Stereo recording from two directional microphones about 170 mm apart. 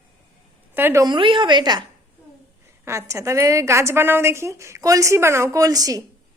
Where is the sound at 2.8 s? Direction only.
15° right (ahead or behind).